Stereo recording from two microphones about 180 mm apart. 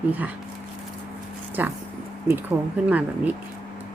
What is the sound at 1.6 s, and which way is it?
Speech, 10° right (ahead or behind).